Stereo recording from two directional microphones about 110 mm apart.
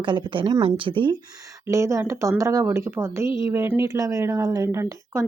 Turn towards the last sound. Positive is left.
turn(degrees=-25)  # may be behind; listen again after turning